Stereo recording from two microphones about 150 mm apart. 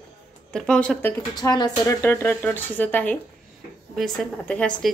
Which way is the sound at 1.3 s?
25° left (ahead or behind).